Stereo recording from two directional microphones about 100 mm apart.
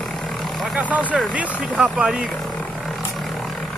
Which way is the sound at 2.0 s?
Centre (ahead or behind).